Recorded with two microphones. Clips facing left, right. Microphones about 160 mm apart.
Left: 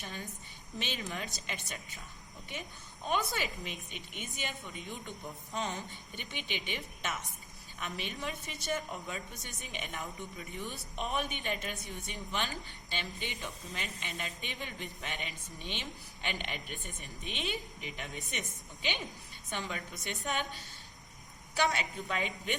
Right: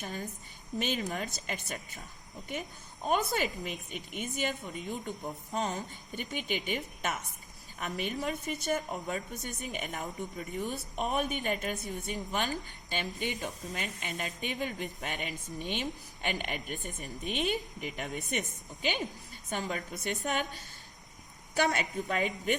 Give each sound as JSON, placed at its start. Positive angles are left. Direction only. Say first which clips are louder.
{"t": 0.0, "sound": "a woman's voice", "louder": "right 5 dB", "side_deg": -40}